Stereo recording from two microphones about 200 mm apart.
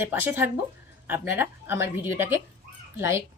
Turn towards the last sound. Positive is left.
turn(degrees=-15)  # may be behind; listen again after turning